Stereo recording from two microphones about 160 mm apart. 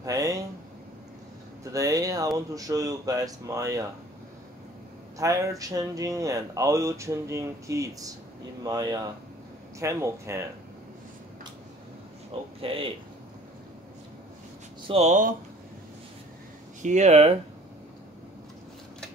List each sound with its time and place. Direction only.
0.0 s speech: 20° right (ahead or behind)
1.6 s speech: 20° right (ahead or behind)
5.1 s speech: 20° right (ahead or behind)
12.6 s speech: 35° right (ahead or behind)
14.9 s speech: 45° right (ahead or behind)
16.8 s speech: 45° right (ahead or behind)